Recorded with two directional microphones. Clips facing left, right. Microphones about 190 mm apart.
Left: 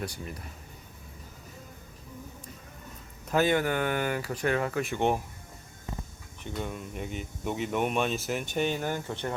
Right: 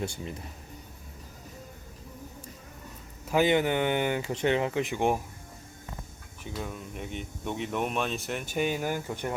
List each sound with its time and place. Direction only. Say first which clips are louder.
0.0 s speech: right 2 dB; 25° right (ahead or behind)
3.2 s speech: right 1 dB; 15° right (ahead or behind)
6.4 s speech: left 1 dB; 5° right (ahead or behind)